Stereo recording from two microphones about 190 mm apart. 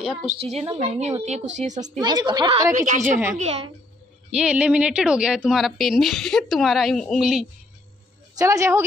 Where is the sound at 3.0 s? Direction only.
10° right (ahead or behind).